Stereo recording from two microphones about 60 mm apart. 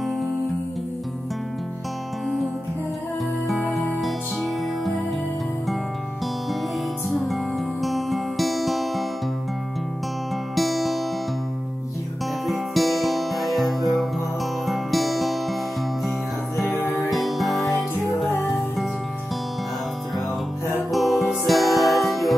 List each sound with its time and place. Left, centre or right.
4.0 s music: centre
7.1 s music: centre
10.5 s music: centre
12.4 s music: centre
16.7 s music: left
17.1 s music: centre
20.9 s music: centre